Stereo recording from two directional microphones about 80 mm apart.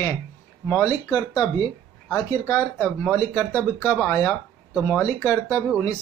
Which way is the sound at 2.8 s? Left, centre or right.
Left.